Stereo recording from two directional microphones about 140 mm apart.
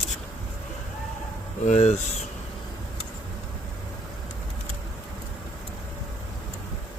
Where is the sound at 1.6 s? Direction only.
55° left (ahead or behind).